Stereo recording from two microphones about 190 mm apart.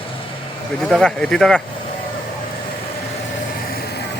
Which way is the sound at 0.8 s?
Centre (ahead or behind).